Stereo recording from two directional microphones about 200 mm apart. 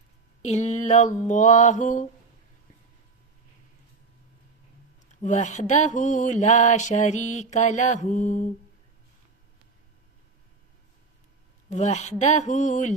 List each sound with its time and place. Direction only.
0.4 s mantra: 35° left (ahead or behind)
5.2 s mantra: 35° left (ahead or behind)
11.7 s mantra: 35° left (ahead or behind)